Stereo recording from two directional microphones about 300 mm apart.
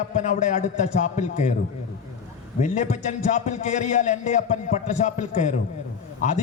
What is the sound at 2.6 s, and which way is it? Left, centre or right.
A man's voice, left.